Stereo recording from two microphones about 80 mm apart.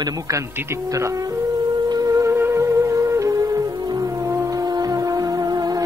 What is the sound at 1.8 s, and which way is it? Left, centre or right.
Music, right.